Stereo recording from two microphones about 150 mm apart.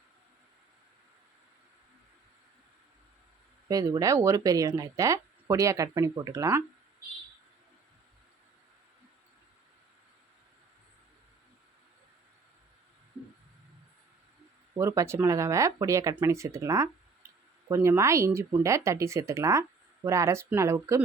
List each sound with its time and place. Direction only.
3.7 s speech: 25° right (ahead or behind)
14.8 s speech: 20° right (ahead or behind)